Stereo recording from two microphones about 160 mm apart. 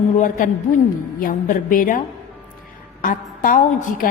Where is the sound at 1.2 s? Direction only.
60° left (ahead or behind).